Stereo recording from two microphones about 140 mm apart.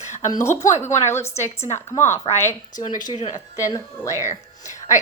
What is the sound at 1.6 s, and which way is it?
Speech, 35° left (ahead or behind).